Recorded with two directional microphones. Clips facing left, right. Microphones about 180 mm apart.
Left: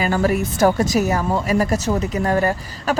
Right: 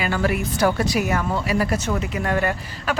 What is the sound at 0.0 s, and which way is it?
A woman's voice, 40° left (ahead or behind).